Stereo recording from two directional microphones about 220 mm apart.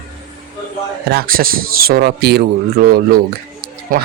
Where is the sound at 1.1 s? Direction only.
45° right (ahead or behind).